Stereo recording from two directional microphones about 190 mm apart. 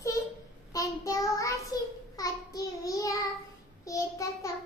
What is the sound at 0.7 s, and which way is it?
Child singing, 15° left (ahead or behind).